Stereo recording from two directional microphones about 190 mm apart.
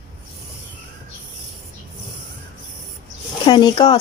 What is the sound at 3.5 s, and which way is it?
Speech, 20° left (ahead or behind).